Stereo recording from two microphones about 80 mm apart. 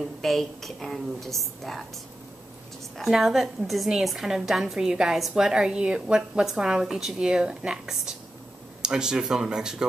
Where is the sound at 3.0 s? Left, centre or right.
Centre.